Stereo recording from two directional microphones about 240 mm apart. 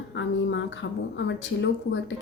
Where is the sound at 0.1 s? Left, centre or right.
Left.